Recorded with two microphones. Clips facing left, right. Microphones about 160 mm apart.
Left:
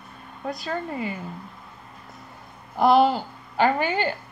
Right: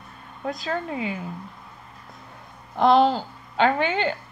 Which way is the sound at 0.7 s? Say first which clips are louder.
Right 1 dB; centre (ahead or behind).